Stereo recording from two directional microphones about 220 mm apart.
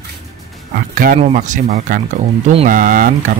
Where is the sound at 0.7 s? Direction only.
40° right (ahead or behind).